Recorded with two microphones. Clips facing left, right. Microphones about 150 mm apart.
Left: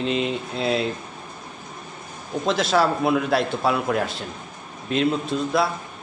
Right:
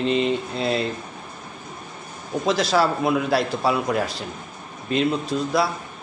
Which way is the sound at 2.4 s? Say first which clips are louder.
Even; centre (ahead or behind).